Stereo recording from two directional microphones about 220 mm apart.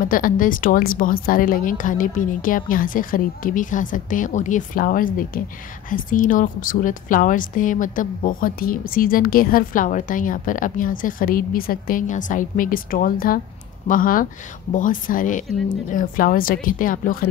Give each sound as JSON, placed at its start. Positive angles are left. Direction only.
{"t": 0.0, "sound": "a woman's voice", "side_deg": 40}